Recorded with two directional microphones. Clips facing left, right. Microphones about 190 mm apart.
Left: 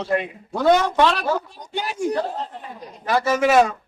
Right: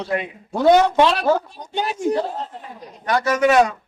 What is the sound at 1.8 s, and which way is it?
Speech, 20° right (ahead or behind).